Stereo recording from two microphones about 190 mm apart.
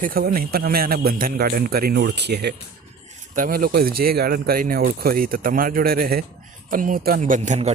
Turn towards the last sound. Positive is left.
turn(degrees=-40)  # may be behind; listen again after turning